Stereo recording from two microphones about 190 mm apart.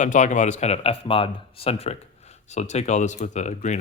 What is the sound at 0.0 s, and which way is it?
Speech, 40° left (ahead or behind).